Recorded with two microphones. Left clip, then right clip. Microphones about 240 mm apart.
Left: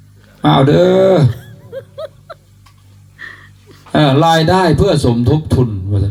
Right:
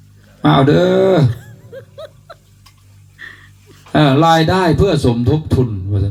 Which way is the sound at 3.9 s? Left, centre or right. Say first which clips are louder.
Even; left.